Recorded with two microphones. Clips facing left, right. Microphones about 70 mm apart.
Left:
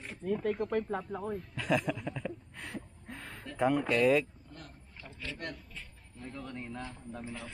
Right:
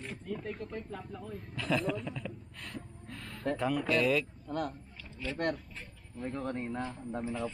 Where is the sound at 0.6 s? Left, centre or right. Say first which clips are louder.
Left 8 dB; left.